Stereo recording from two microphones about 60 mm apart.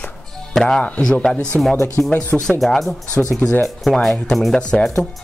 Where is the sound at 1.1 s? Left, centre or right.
Left.